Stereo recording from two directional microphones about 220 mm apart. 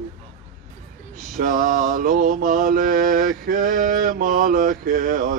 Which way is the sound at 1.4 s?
40° right (ahead or behind).